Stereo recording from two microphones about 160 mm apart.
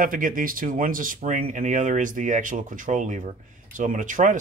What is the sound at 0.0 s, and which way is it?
Speech, 60° right (ahead or behind).